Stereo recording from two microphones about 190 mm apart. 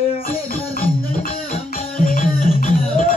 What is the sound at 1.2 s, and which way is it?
Music, 45° left (ahead or behind).